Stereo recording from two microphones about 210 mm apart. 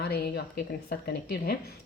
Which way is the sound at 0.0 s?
50° left (ahead or behind).